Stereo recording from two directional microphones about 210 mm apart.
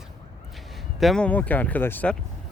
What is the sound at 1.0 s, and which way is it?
Speech, centre (ahead or behind).